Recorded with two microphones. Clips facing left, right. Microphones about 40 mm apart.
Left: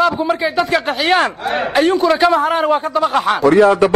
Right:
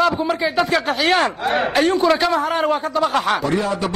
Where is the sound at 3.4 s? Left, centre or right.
Left.